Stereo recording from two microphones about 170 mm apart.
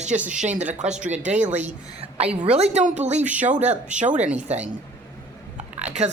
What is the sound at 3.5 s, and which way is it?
Speech, 45° right (ahead or behind).